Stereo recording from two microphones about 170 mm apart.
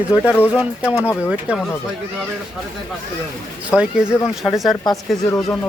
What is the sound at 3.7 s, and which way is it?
Speech, 5° right (ahead or behind).